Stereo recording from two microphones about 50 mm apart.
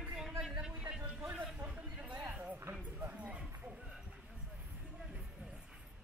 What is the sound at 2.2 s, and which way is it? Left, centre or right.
Music, right.